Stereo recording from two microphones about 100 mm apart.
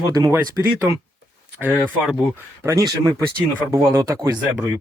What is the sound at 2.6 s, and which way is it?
Speech, 25° right (ahead or behind).